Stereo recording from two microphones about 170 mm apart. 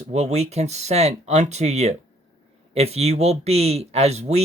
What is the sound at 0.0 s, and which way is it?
Speech, 40° right (ahead or behind).